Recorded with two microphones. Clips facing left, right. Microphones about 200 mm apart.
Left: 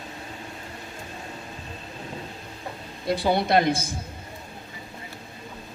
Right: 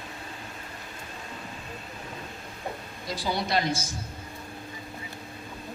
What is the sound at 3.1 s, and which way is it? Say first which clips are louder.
Speech: left 7 dB; 60° left (ahead or behind).